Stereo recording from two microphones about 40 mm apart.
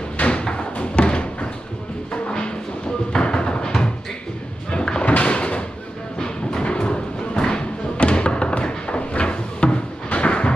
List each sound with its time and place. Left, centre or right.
0.3 s thump: left
3.1 s music: left
4.6 s a sound: left
5.2 s door: left
6.1 s a sound: left
10.1 s vehicle: left